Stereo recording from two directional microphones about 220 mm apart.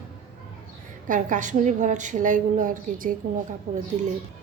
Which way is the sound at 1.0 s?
35° right (ahead or behind).